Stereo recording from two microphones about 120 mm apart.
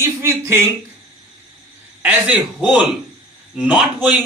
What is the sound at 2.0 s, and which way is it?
Speech, 10° right (ahead or behind).